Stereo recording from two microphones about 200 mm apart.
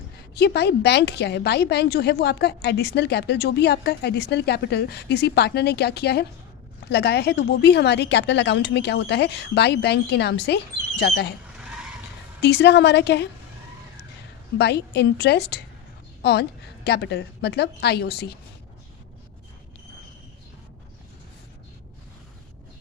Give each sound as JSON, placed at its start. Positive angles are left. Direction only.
{"t": 0.3, "sound": "a woman's voice", "side_deg": 55}
{"t": 12.4, "sound": "a woman's voice", "side_deg": 55}
{"t": 14.6, "sound": "a woman's voice", "side_deg": 55}